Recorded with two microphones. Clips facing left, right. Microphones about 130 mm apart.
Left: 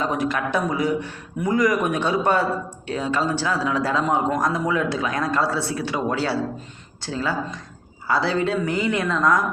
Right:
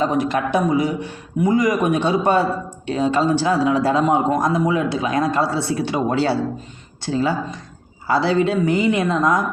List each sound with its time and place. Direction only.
0.0 s speech: 25° right (ahead or behind)